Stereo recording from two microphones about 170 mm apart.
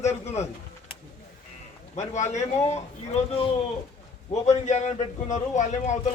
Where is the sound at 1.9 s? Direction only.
45° left (ahead or behind).